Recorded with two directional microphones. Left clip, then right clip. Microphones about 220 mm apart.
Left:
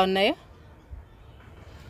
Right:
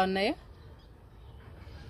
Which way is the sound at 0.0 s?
40° left (ahead or behind).